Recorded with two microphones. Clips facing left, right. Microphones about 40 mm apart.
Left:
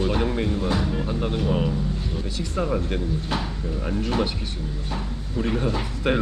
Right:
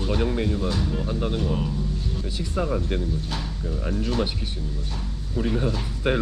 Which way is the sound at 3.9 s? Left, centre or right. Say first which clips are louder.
Left 1 dB; left.